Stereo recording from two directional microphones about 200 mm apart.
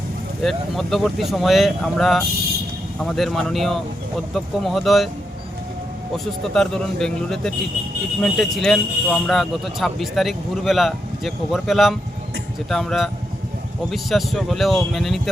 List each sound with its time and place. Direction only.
0.4 s speech: centre (ahead or behind)
6.4 s speech: 5° left (ahead or behind)